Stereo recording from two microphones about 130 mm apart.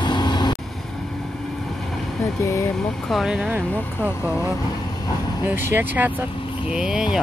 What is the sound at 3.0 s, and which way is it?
Speech, centre (ahead or behind).